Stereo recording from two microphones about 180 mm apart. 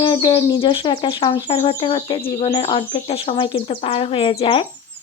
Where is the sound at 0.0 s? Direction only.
25° left (ahead or behind).